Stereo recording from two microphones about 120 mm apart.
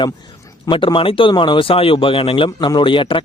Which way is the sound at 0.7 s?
45° left (ahead or behind).